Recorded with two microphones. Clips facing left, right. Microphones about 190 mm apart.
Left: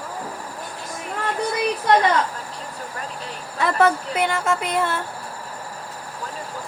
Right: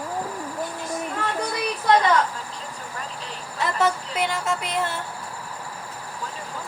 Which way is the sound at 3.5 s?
55° left (ahead or behind).